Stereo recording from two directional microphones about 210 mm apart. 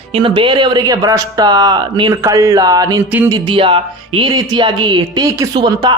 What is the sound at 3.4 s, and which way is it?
A man's voice, 25° right (ahead or behind).